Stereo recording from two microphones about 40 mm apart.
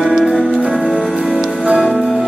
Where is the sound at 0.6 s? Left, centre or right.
Right.